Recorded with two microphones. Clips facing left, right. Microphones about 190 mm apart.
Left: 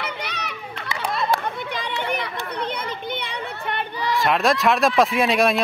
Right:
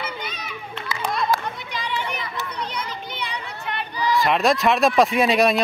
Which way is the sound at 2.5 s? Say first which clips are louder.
Left 3 dB; 55° left (ahead or behind).